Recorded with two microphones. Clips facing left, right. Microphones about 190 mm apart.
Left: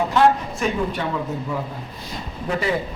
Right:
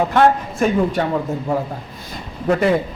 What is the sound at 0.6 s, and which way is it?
Speech, 50° right (ahead or behind).